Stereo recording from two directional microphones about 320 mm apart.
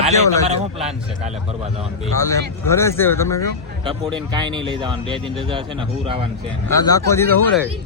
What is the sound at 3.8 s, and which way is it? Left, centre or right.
Speech, centre.